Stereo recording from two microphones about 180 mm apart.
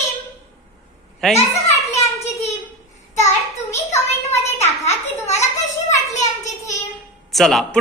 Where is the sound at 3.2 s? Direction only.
15° left (ahead or behind).